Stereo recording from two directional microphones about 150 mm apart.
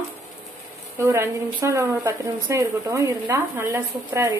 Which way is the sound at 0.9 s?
20° right (ahead or behind).